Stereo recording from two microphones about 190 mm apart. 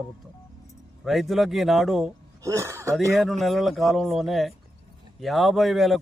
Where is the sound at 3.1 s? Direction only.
Centre (ahead or behind).